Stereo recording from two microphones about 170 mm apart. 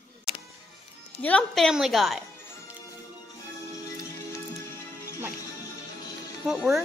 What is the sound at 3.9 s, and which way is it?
Music, 20° left (ahead or behind).